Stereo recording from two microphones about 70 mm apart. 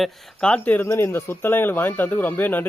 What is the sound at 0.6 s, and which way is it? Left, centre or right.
Speech, left.